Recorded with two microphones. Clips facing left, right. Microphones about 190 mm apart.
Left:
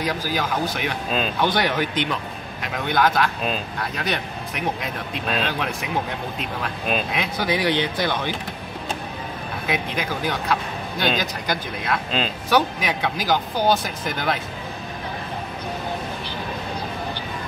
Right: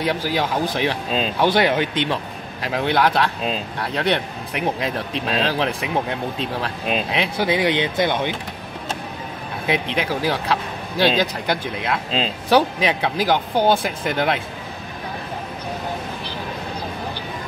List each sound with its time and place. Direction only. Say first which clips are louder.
0.0 s speech: right 3 dB; 25° right (ahead or behind)
5.1 s speech: right 1 dB; 30° right (ahead or behind)
9.7 s speech: right 4 dB; 30° right (ahead or behind)